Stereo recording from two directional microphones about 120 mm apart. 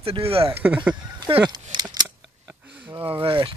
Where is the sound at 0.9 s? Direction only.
40° right (ahead or behind).